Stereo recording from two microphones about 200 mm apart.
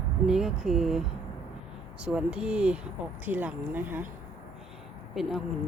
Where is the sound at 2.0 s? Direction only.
5° right (ahead or behind).